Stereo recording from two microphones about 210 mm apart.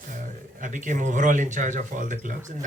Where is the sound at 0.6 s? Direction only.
35° right (ahead or behind).